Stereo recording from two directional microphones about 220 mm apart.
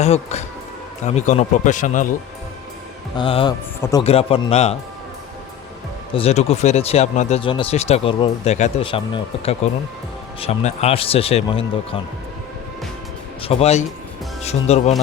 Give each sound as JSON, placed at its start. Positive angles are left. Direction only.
{"t": 0.0, "sound": "a man's voice", "side_deg": 30}
{"t": 3.2, "sound": "speech", "side_deg": 20}
{"t": 6.1, "sound": "speech", "side_deg": 30}
{"t": 13.4, "sound": "speech", "side_deg": 25}